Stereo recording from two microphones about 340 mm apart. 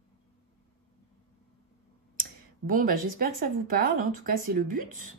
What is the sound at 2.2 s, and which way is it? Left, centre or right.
Speech, right.